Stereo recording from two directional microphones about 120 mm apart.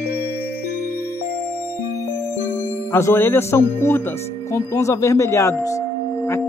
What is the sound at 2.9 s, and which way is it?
Speech, 20° left (ahead or behind).